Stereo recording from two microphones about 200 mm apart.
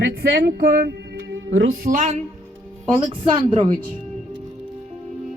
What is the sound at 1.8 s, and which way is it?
Speech, 40° right (ahead or behind).